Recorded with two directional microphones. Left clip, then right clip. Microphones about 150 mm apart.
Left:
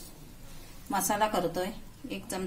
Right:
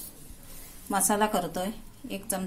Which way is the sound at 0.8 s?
45° right (ahead or behind).